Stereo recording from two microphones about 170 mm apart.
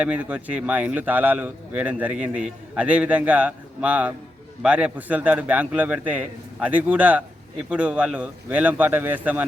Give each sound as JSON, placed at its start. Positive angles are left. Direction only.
{"t": 0.0, "sound": "a man's voice", "side_deg": -10}